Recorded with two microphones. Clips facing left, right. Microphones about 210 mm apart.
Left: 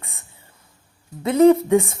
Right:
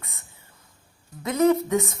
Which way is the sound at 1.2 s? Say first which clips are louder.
Left 6 dB; 30° left (ahead or behind).